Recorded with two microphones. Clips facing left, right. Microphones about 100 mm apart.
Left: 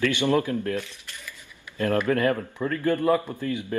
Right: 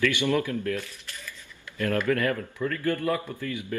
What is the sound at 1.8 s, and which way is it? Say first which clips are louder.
A man's voice: left 3 dB; 25° left (ahead or behind).